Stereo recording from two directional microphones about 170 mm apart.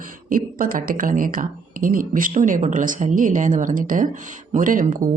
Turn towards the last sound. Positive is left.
turn(degrees=-50)  # may be behind; listen again after turning